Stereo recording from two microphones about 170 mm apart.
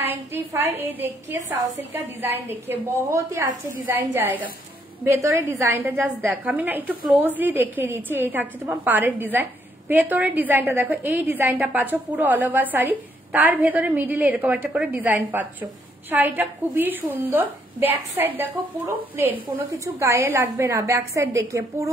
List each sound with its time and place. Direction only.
0.3 s a woman's voice: 15° right (ahead or behind)